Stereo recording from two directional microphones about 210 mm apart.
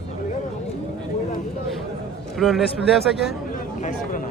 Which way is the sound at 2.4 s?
Centre (ahead or behind).